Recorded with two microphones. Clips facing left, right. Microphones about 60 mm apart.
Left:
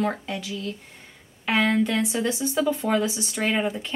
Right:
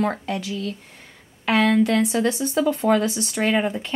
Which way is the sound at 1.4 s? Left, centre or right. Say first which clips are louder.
Right 4 dB; right.